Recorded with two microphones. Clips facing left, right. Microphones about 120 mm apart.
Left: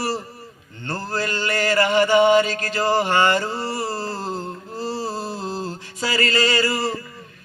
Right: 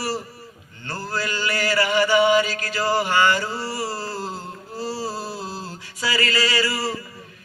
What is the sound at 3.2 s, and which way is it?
Mantra, 45° left (ahead or behind).